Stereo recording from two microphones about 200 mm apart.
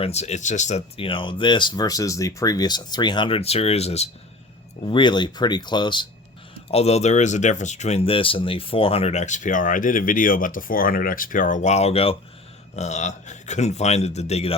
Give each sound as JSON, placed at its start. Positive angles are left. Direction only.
{"t": 0.0, "sound": "speech", "side_deg": 35}